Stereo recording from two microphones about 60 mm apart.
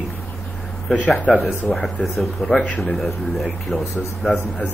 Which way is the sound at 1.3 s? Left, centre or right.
Centre.